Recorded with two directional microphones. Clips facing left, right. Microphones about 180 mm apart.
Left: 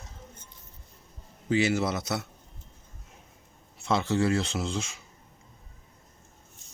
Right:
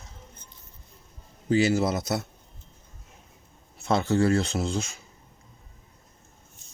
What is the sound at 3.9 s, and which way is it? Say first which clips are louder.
Speech: right 3 dB; 50° right (ahead or behind).